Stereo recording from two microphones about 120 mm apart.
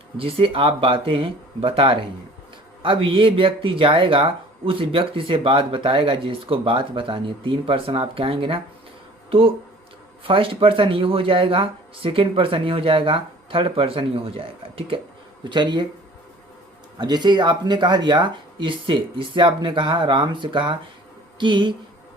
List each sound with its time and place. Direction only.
0.2 s speech: 50° right (ahead or behind)
15.4 s speech: 40° right (ahead or behind)
17.0 s a woman's voice: 40° right (ahead or behind)